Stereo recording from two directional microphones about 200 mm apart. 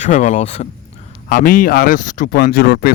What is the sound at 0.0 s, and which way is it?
Speech, 35° left (ahead or behind).